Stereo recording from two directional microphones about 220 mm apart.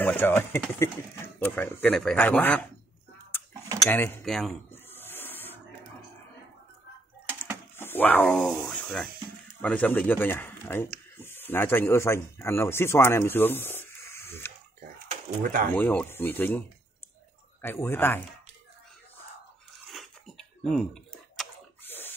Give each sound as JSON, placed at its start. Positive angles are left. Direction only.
{"t": 0.0, "sound": "speech", "side_deg": 10}
{"t": 3.8, "sound": "a sound", "side_deg": 10}
{"t": 7.7, "sound": "speech", "side_deg": 10}
{"t": 15.4, "sound": "speech", "side_deg": -40}
{"t": 15.7, "sound": "speech", "side_deg": 5}
{"t": 19.9, "sound": "a sound", "side_deg": 0}